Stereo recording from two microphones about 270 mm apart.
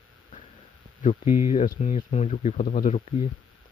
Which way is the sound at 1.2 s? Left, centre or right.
Left.